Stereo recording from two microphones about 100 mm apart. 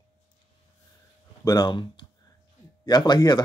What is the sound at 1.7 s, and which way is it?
Speech, 50° left (ahead or behind).